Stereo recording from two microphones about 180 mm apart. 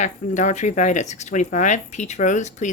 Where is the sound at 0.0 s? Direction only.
40° left (ahead or behind).